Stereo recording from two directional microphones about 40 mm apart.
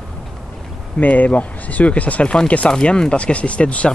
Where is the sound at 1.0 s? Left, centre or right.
Left.